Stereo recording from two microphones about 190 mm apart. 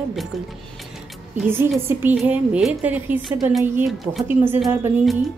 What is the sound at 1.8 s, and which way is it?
A woman's voice, 10° right (ahead or behind).